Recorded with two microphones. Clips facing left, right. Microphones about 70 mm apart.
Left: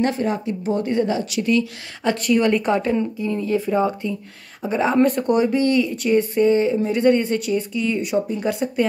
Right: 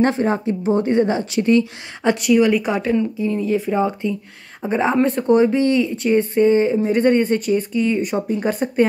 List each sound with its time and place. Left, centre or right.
0.0 s a woman's voice: right
2.2 s a woman's voice: centre; by 8.8 s right